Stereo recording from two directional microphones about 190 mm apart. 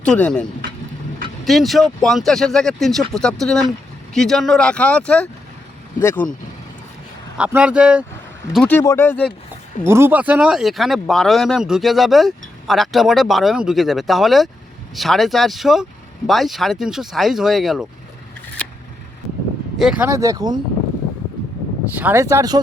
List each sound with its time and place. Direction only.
0.0 s speech: 5° left (ahead or behind)
1.5 s speech: centre (ahead or behind)
7.3 s speech: 5° right (ahead or behind)
8.5 s speech: 10° left (ahead or behind)
9.8 s speech: 10° right (ahead or behind)
19.8 s speech: 5° right (ahead or behind)
21.8 s speech: 10° right (ahead or behind)